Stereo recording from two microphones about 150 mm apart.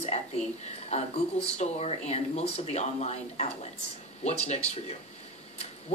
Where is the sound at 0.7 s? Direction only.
45° left (ahead or behind).